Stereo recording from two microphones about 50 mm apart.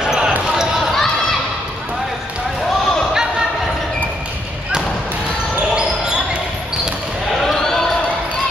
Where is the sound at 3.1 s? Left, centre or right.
Centre.